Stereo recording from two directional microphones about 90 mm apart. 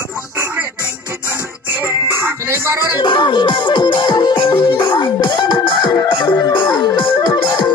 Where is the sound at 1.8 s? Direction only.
25° right (ahead or behind).